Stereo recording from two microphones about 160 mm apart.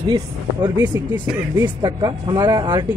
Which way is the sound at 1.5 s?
15° right (ahead or behind).